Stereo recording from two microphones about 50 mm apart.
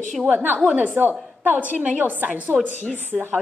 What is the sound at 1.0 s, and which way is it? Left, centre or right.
Speech, right.